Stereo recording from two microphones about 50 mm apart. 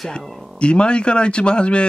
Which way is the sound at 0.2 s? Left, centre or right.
Centre.